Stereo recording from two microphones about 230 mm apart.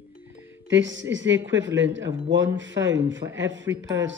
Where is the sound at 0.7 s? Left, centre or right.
Right.